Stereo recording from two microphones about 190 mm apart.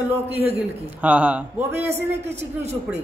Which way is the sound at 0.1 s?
35° right (ahead or behind).